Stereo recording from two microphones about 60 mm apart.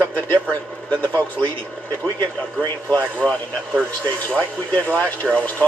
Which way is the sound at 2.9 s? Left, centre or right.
Left.